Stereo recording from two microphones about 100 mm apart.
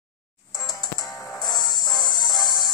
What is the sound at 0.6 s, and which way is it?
Music, 40° left (ahead or behind).